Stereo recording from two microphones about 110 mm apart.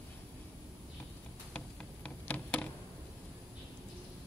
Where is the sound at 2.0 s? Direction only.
10° left (ahead or behind).